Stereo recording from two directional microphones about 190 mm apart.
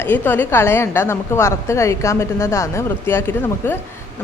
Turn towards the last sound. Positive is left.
turn(degrees=10)  # may be behind; listen again after turning